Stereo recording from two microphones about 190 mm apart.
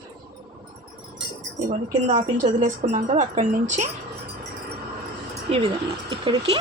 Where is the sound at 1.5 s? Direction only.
45° right (ahead or behind).